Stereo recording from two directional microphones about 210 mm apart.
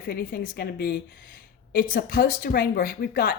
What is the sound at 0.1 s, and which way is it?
Speech, 45° left (ahead or behind).